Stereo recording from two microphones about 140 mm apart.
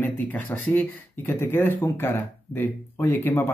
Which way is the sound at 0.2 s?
10° left (ahead or behind).